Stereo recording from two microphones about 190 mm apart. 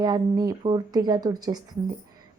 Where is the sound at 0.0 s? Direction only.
20° right (ahead or behind).